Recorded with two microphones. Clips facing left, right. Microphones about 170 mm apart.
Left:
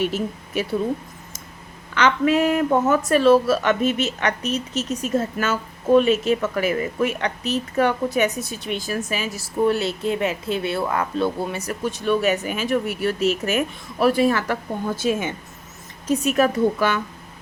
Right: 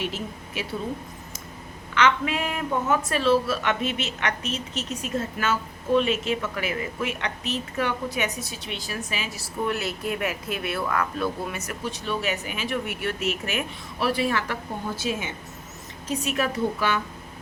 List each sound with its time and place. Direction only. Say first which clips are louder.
0.0 s a woman's voice: left 7 dB; 45° left (ahead or behind)
2.0 s a woman's voice: left 5 dB; 40° left (ahead or behind)
9.7 s speech: left 6 dB; 25° left (ahead or behind)
11.9 s a woman's voice: left 8 dB; 50° left (ahead or behind)